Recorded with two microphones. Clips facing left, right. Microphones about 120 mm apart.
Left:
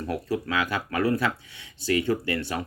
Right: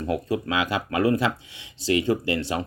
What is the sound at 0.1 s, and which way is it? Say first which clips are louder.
Speech: right 3 dB; 15° right (ahead or behind).